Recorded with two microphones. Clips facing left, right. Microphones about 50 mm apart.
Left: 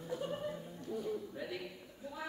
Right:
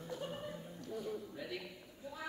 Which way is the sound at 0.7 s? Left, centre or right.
Left.